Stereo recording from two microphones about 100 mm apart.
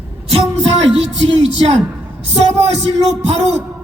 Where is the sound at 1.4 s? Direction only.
90° right.